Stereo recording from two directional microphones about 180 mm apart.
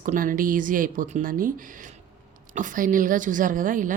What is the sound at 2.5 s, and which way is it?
Speech, 45° right (ahead or behind).